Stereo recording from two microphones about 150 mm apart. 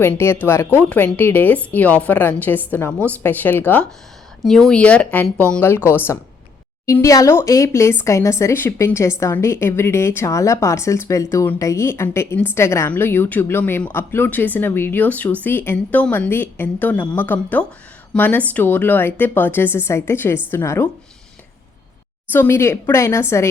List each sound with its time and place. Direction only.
0.0 s a woman's voice: 15° left (ahead or behind)
22.3 s a woman's voice: 15° left (ahead or behind)